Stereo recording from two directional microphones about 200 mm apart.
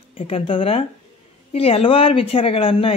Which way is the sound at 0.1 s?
30° left (ahead or behind).